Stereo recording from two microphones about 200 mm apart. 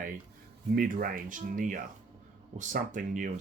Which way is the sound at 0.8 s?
45° right (ahead or behind).